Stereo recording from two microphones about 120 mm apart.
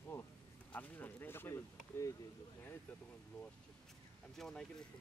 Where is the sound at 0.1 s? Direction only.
15° left (ahead or behind).